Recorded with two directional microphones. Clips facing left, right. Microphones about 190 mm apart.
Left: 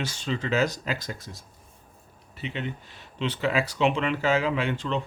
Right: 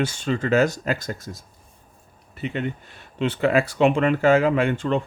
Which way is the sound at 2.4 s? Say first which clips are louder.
Right 6 dB; 50° right (ahead or behind).